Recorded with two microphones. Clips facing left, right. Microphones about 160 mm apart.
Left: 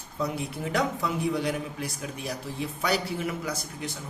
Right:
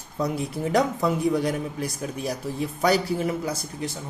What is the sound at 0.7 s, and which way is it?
A man's voice, 45° right (ahead or behind).